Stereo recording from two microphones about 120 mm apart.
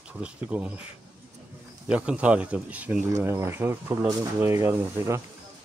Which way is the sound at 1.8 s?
10° right (ahead or behind).